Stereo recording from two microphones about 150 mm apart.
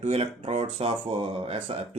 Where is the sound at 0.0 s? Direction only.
40° right (ahead or behind).